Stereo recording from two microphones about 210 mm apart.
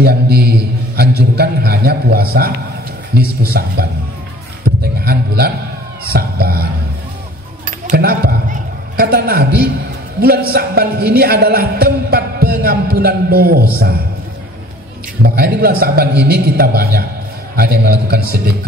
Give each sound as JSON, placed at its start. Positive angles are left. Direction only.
{"t": 0.0, "sound": "a man's voice", "side_deg": -50}
{"t": 5.0, "sound": "a man's voice", "side_deg": -50}
{"t": 7.6, "sound": "a sound", "side_deg": -45}
{"t": 10.2, "sound": "a man's voice", "side_deg": -45}
{"t": 15.2, "sound": "a man's voice", "side_deg": -50}